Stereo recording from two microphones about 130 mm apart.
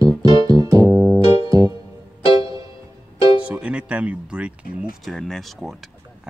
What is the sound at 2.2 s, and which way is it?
Music, 45° left (ahead or behind).